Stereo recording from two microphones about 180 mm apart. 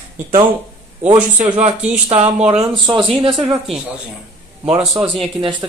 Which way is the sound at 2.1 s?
35° right (ahead or behind).